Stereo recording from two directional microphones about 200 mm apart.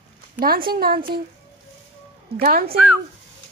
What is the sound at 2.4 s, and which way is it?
Speech, 50° right (ahead or behind).